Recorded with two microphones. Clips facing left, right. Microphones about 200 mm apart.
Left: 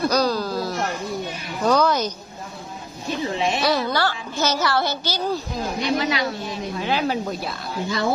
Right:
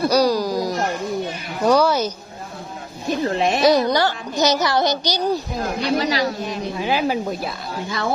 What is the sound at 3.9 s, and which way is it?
Speech, 20° right (ahead or behind).